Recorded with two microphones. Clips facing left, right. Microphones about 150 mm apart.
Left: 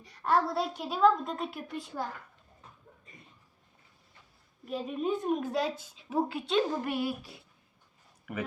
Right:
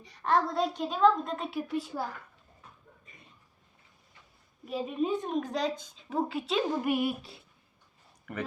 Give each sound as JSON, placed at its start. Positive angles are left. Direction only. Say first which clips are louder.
{"t": 0.0, "sound": "a woman's voice", "louder": "even", "side_deg": 0}
{"t": 4.6, "sound": "a woman's voice", "louder": "right 2 dB", "side_deg": 0}
{"t": 6.8, "sound": "speech", "louder": "right 3 dB", "side_deg": -15}
{"t": 8.3, "sound": "a woman's voice", "louder": "even", "side_deg": 5}